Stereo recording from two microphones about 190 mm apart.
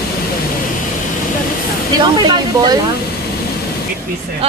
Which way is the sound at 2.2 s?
25° right (ahead or behind).